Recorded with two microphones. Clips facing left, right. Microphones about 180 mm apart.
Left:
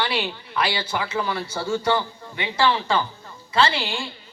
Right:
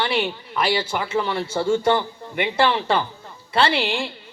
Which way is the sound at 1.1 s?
25° right (ahead or behind).